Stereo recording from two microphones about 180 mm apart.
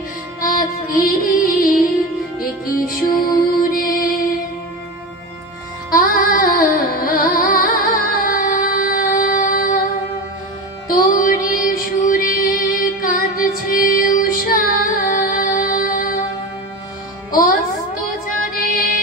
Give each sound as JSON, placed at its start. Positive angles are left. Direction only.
{"t": 0.5, "sound": "music", "side_deg": 50}
{"t": 3.2, "sound": "music", "side_deg": 55}
{"t": 5.9, "sound": "music", "side_deg": 50}
{"t": 10.9, "sound": "music", "side_deg": 50}
{"t": 17.3, "sound": "music", "side_deg": 50}